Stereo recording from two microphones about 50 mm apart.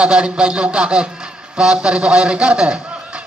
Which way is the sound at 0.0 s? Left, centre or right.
Centre.